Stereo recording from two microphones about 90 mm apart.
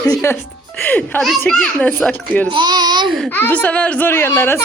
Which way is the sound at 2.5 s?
55° right (ahead or behind).